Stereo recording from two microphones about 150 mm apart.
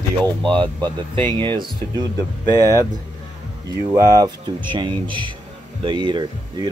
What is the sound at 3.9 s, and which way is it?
Speech, 25° right (ahead or behind).